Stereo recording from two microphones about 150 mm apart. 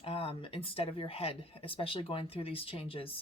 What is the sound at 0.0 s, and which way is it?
Speech, 40° left (ahead or behind).